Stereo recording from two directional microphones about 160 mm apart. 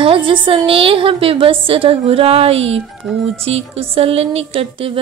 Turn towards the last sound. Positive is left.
turn(degrees=-35)  # may be behind; listen again after turning